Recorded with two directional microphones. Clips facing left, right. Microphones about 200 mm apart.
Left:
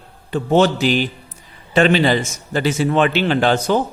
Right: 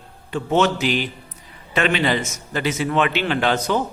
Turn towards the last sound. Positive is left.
turn(degrees=30)  # may be behind; listen again after turning